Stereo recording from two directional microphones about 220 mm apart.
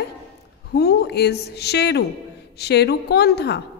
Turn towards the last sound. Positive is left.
turn(degrees=50)  # may be behind; listen again after turning